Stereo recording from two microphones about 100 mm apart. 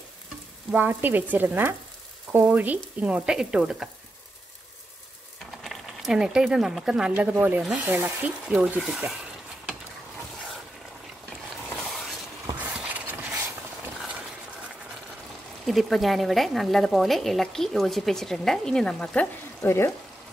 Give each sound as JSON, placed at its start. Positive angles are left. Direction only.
{"t": 0.7, "sound": "frying", "side_deg": -20}
{"t": 2.3, "sound": "speech", "side_deg": -15}
{"t": 5.6, "sound": "speech", "side_deg": 0}
{"t": 11.7, "sound": "a sound", "side_deg": 0}
{"t": 12.5, "sound": "a sound", "side_deg": -15}
{"t": 15.6, "sound": "speech", "side_deg": 0}
{"t": 19.6, "sound": "speech", "side_deg": 25}